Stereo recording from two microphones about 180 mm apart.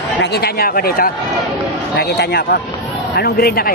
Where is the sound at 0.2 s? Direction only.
65° left (ahead or behind).